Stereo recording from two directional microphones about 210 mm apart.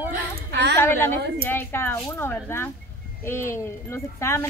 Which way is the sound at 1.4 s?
10° left (ahead or behind).